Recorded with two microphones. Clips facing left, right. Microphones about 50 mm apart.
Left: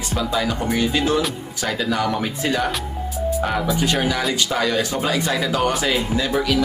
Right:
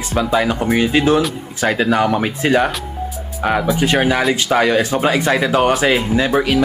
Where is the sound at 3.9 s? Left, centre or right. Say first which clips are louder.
Right 6 dB; right.